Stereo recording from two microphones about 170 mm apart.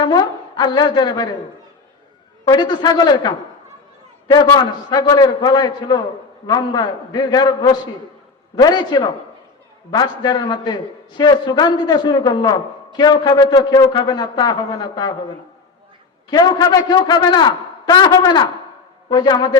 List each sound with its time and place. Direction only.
0.0 s a man's voice: 25° left (ahead or behind)
2.4 s a man's voice: 25° left (ahead or behind)
4.5 s a man's voice: 25° left (ahead or behind)
16.3 s a man's voice: 25° left (ahead or behind)